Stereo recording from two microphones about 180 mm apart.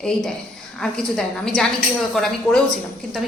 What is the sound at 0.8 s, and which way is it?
A woman's voice, 5° left (ahead or behind).